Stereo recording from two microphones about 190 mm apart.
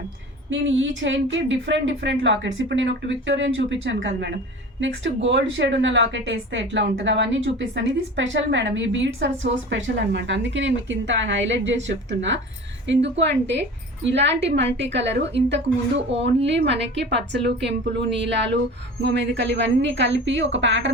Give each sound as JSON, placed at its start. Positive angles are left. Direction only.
{"t": 0.5, "sound": "a woman's voice", "side_deg": -80}
{"t": 4.8, "sound": "a woman's voice", "side_deg": -75}